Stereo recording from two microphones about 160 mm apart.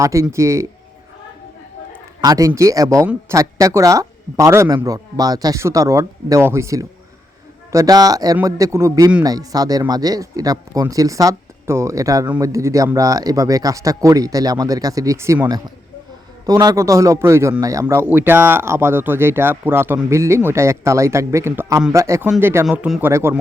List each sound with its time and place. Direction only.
0.0 s a man's voice: 20° right (ahead or behind)
2.2 s a man's voice: 20° right (ahead or behind)